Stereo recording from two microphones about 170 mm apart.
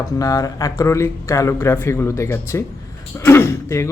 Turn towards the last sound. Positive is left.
turn(degrees=15)  # may be behind; listen again after turning